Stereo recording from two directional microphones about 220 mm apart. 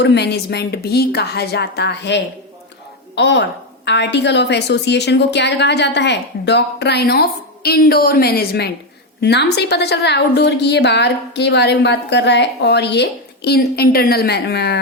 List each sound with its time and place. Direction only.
0.0 s a woman's voice: 50° left (ahead or behind)